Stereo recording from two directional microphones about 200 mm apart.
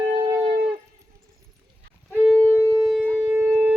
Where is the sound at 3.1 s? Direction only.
5° right (ahead or behind).